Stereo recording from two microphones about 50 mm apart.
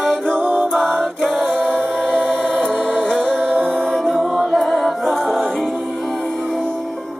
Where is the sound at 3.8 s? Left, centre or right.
Centre.